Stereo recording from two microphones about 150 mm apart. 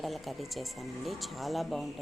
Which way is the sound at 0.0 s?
Centre (ahead or behind).